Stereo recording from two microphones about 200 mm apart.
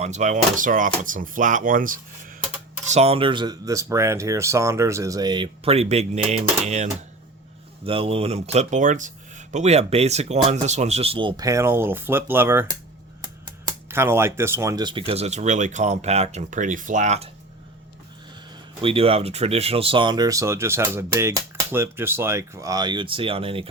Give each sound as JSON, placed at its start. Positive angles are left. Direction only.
{"t": 0.0, "sound": "speech", "side_deg": -35}
{"t": 7.9, "sound": "speech", "side_deg": -25}
{"t": 13.8, "sound": "speech", "side_deg": -10}
{"t": 18.8, "sound": "speech", "side_deg": -30}